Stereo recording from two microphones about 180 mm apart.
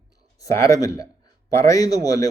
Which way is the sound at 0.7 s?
20° left (ahead or behind).